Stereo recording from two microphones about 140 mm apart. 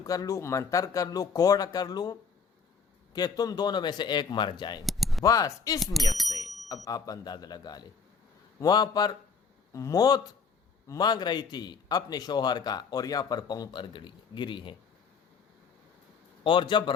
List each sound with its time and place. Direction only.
0.0 s a man's voice: 25° left (ahead or behind)
4.9 s a sound: centre (ahead or behind)
5.2 s a man's voice: 25° left (ahead or behind)
5.8 s speech: centre (ahead or behind)
6.8 s a man's voice: 25° left (ahead or behind)
16.4 s speech: 35° left (ahead or behind)